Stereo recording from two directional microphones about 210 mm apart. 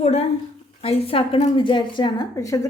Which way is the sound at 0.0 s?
30° left (ahead or behind).